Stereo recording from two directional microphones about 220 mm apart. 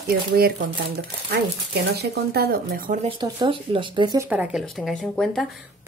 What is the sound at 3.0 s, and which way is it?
Speech, 20° right (ahead or behind).